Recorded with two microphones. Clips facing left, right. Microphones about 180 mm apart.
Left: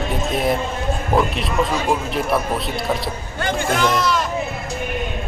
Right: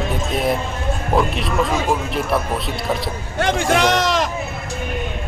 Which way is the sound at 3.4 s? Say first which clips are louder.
Right 3 dB; 85° right.